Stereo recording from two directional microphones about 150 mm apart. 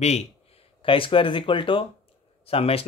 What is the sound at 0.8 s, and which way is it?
Speech, 35° left (ahead or behind).